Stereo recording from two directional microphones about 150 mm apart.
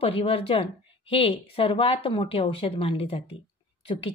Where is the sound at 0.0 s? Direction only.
40° left (ahead or behind).